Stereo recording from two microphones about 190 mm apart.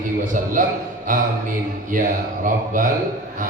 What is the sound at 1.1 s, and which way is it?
Speech, 45° right (ahead or behind).